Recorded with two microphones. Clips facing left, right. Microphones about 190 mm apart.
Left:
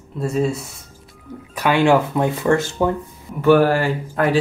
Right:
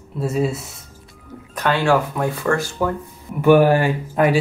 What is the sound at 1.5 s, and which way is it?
Speech, 10° left (ahead or behind).